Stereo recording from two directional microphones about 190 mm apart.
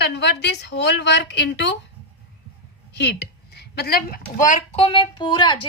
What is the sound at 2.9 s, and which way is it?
A woman's voice, 60° left (ahead or behind).